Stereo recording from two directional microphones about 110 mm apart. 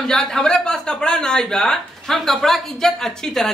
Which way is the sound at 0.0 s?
5° left (ahead or behind).